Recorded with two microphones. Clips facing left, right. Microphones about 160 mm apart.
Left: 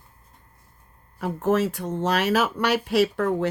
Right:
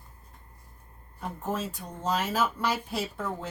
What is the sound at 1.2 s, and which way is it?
A woman's voice, 80° left.